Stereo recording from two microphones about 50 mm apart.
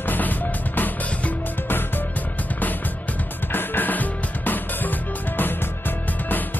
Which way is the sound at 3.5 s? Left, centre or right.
Left.